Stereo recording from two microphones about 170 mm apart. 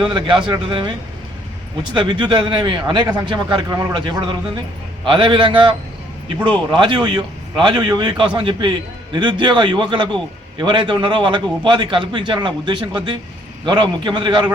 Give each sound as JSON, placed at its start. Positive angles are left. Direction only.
{"t": 0.0, "sound": "a man's voice", "side_deg": -25}